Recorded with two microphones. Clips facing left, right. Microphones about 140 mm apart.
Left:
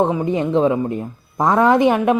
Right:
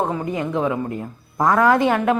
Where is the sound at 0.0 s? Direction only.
20° left (ahead or behind).